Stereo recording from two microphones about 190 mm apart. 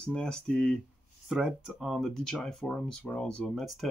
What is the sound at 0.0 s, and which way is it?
Speech, 5° left (ahead or behind).